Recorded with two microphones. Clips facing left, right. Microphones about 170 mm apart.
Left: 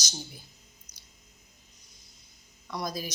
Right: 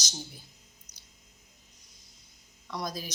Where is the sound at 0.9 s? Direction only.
35° right (ahead or behind).